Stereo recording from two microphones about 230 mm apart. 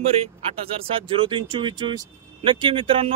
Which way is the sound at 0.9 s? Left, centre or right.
Right.